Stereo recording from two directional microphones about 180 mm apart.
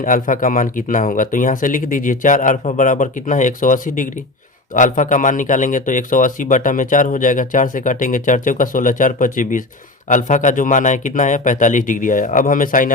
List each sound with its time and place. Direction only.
0.0 s a man's voice: 50° left (ahead or behind)